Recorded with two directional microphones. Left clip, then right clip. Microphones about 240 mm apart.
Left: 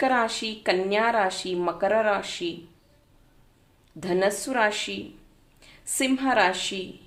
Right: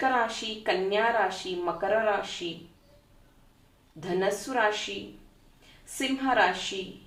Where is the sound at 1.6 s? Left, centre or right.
Left.